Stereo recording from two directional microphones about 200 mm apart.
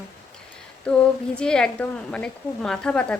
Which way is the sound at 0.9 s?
5° left (ahead or behind).